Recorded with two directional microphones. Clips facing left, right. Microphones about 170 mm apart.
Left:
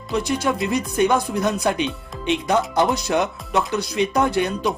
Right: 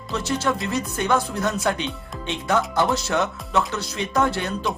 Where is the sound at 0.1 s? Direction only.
15° left (ahead or behind).